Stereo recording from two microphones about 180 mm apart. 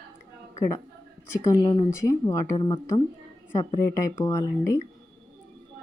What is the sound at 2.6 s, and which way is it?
A woman's voice, 30° left (ahead or behind).